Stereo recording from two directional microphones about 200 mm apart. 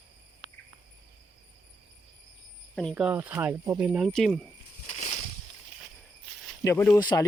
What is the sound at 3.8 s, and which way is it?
Speech, centre (ahead or behind).